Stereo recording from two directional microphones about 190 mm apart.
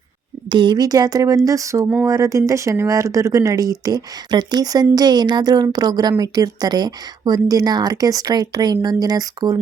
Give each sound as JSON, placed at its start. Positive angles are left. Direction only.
{"t": 0.4, "sound": "speech", "side_deg": -25}